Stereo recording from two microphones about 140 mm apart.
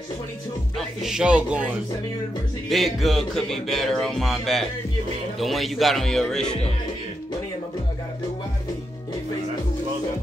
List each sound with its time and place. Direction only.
0.7 s speech: 5° right (ahead or behind)
2.7 s music: centre (ahead or behind)